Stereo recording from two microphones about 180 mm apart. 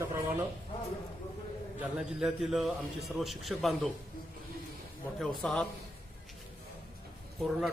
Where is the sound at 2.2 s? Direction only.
Centre (ahead or behind).